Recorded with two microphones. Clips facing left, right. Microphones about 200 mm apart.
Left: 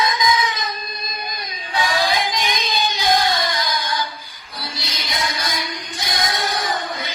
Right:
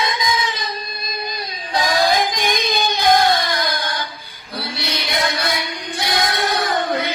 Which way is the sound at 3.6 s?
60° right (ahead or behind).